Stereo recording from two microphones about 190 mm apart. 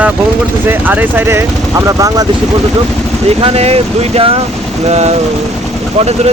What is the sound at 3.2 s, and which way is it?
Speech, 30° right (ahead or behind).